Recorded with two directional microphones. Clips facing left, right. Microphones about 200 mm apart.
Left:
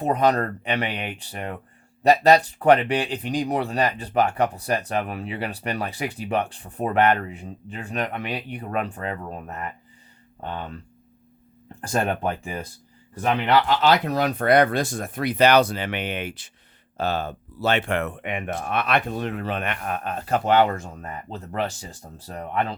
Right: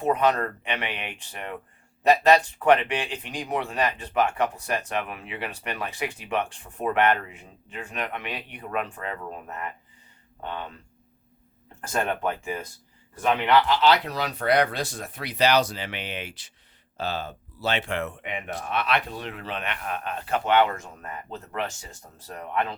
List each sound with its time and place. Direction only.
0.0 s speech: 35° left (ahead or behind)
11.8 s speech: 35° left (ahead or behind)